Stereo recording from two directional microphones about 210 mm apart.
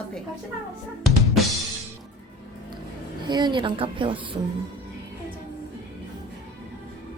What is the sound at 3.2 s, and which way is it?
Speech, 20° right (ahead or behind).